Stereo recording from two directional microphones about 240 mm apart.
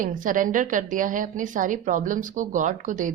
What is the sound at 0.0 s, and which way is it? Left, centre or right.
A woman's voice, right.